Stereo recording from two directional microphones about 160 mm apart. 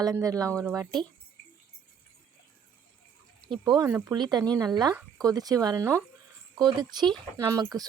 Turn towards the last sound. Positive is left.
turn(degrees=-25)  # may be behind; listen again after turning